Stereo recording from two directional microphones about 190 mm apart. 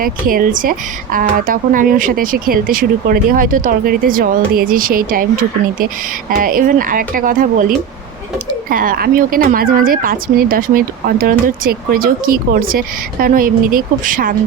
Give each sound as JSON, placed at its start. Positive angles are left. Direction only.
{"t": 0.0, "sound": "a woman's voice", "side_deg": -50}
{"t": 8.7, "sound": "a woman's voice", "side_deg": -45}